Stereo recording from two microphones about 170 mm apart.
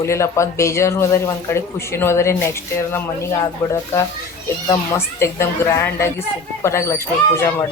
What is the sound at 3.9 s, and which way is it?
Speech, 15° left (ahead or behind).